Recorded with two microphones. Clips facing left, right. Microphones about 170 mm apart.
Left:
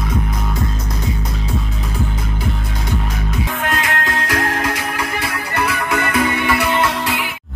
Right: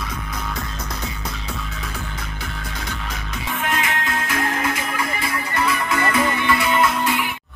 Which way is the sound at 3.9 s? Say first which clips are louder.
Left 4 dB; 85° left.